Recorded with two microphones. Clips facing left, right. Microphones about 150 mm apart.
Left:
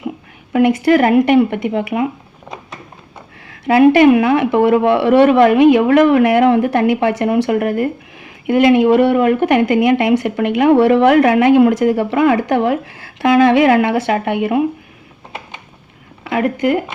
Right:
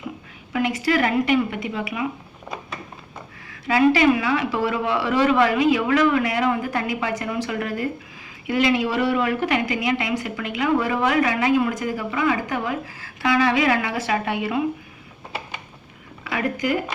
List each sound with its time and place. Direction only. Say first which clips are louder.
0.5 s speech: left 10 dB; 55° left (ahead or behind)
3.9 s speech: left 9 dB; 60° left (ahead or behind)
16.2 s speech: left 8 dB; 60° left (ahead or behind)